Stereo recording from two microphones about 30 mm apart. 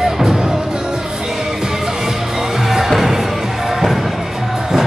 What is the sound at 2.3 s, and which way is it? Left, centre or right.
Music, centre.